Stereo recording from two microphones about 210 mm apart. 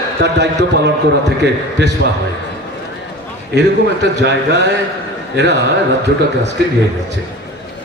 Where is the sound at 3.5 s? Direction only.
55° right (ahead or behind).